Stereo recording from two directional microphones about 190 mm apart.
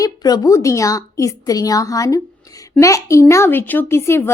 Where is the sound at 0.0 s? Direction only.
20° left (ahead or behind).